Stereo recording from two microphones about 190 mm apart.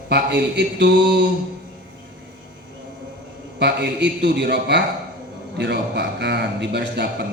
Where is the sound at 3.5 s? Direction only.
60° right (ahead or behind).